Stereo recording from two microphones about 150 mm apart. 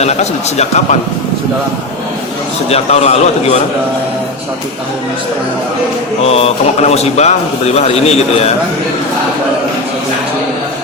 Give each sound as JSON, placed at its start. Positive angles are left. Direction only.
{"t": 0.0, "sound": "a man's voice", "side_deg": 45}
{"t": 2.6, "sound": "a man's voice", "side_deg": 45}
{"t": 6.2, "sound": "a man's voice", "side_deg": 40}